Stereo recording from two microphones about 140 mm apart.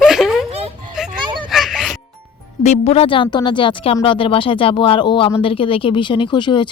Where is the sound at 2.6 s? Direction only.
50° left (ahead or behind).